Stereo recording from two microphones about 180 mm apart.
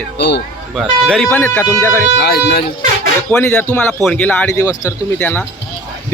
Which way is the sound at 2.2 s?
65° left (ahead or behind).